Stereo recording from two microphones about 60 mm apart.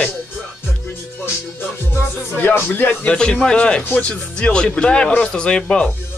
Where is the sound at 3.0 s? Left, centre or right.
Centre.